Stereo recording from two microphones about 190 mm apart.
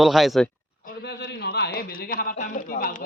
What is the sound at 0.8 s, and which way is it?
A man's voice, 60° left (ahead or behind).